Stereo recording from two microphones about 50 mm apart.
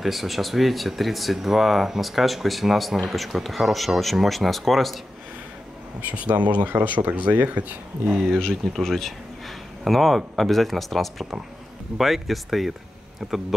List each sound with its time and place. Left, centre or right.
0.0 s speech: centre
6.0 s speech: right
6.6 s speech: right
8.8 s speech: centre